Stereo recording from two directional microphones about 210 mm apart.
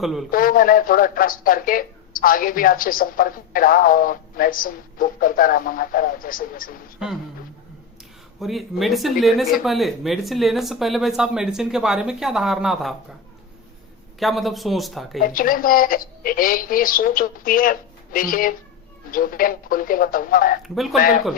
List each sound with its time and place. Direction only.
0.0 s speech: centre (ahead or behind)
0.3 s speech: 40° left (ahead or behind)
8.4 s speech: centre (ahead or behind)
14.2 s speech: centre (ahead or behind)
15.2 s speech: 40° left (ahead or behind)
20.7 s speech: centre (ahead or behind)